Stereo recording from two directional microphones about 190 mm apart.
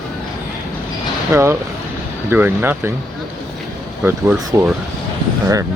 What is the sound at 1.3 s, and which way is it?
Speech, 15° right (ahead or behind).